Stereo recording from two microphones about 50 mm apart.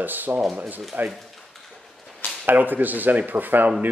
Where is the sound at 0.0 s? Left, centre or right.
Right.